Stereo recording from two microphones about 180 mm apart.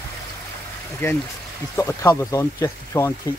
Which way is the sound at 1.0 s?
10° left (ahead or behind).